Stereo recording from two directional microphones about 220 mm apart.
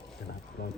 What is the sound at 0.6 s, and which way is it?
Speech, 45° left (ahead or behind).